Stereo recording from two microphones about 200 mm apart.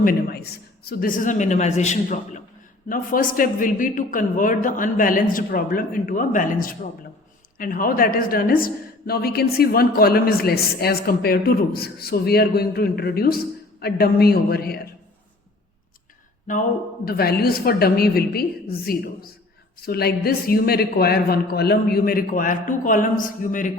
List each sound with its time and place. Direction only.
0.0 s a woman's voice: 50° left (ahead or behind)
17.1 s a woman's voice: 50° left (ahead or behind)